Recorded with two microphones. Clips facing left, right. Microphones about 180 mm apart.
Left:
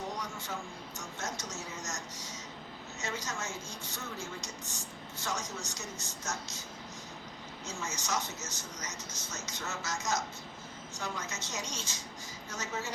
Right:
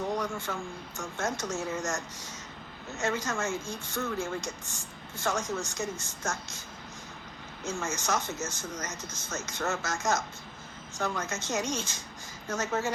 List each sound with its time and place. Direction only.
0.2 s a sound: 55° right (ahead or behind)
0.9 s speech: 50° right (ahead or behind)
7.6 s speech: 50° right (ahead or behind)